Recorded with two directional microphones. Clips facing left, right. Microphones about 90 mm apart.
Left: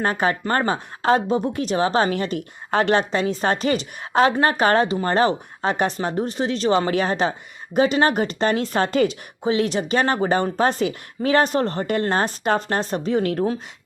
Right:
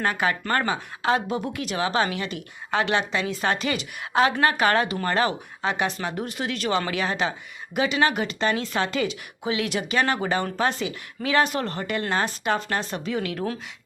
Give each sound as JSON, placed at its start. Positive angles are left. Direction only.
{"t": 0.0, "sound": "a woman's voice", "side_deg": 35}